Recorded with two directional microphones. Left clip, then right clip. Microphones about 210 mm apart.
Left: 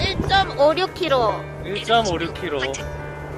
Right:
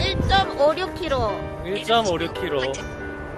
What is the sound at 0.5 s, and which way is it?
Speech, 30° left (ahead or behind).